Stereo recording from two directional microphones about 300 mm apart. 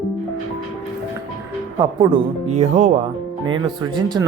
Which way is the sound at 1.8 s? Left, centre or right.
Centre.